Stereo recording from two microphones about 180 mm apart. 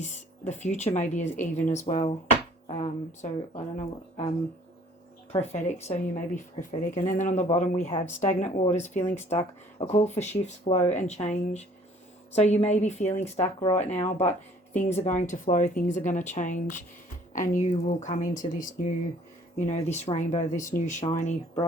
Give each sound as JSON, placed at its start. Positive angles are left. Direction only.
{"t": 0.0, "sound": "a woman's voice", "side_deg": 40}
{"t": 5.3, "sound": "a woman's voice", "side_deg": 35}